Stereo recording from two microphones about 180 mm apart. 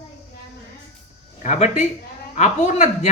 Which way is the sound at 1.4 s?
40° left (ahead or behind).